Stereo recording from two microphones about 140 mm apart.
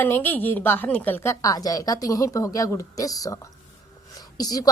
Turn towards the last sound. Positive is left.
turn(degrees=25)  # may be behind; listen again after turning